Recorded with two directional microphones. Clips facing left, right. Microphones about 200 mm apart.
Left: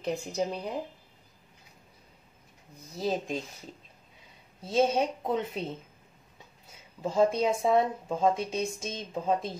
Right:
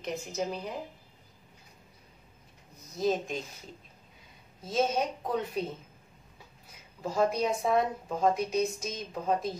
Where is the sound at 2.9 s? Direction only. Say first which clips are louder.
Right 1 dB; 30° left (ahead or behind).